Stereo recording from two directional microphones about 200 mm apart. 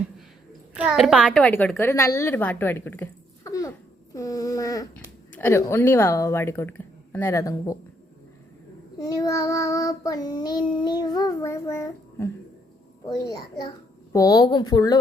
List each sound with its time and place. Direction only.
0.7 s a child's voice: 5° right (ahead or behind); by 7.8 s 15° left (ahead or behind)
9.0 s child singing: 20° left (ahead or behind)
13.1 s a child's voice: 20° left (ahead or behind)